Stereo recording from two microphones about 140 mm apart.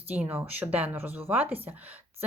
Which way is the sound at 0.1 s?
10° right (ahead or behind).